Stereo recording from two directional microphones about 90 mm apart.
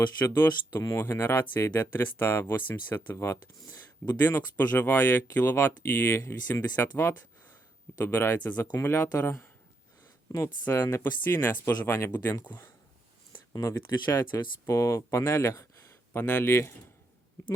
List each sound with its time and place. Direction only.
0.3 s speech: 25° left (ahead or behind)
10.6 s speech: 25° left (ahead or behind)
13.5 s speech: 35° left (ahead or behind)